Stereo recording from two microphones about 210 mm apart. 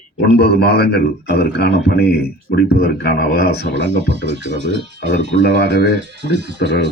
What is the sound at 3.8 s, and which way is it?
Speech, 55° right (ahead or behind).